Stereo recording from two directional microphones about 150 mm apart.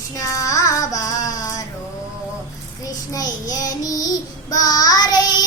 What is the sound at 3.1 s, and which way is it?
Child singing, 25° left (ahead or behind).